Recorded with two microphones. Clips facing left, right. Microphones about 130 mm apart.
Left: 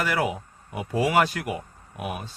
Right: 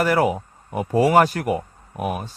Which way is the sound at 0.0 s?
40° right (ahead or behind).